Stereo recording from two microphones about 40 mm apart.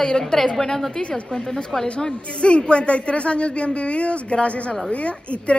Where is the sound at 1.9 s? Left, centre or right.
Left.